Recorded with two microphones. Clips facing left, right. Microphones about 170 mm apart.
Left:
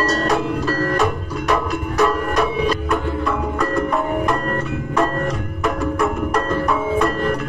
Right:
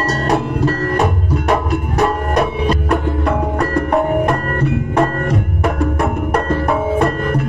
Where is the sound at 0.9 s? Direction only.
55° right (ahead or behind).